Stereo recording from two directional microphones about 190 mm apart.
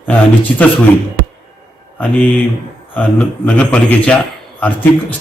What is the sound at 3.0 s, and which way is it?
Speech, 5° left (ahead or behind).